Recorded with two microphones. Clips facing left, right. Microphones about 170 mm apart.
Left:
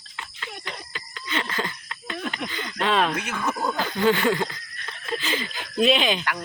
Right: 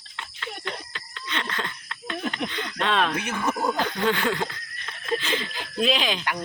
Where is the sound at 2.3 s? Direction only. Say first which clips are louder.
Right 1 dB; 5° left (ahead or behind).